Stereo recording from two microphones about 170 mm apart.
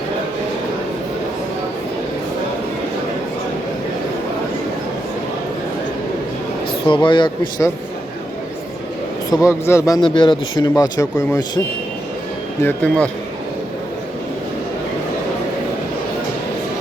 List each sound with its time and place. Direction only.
6.8 s speech: 30° left (ahead or behind)
9.4 s speech: 15° left (ahead or behind)
12.6 s speech: 10° left (ahead or behind)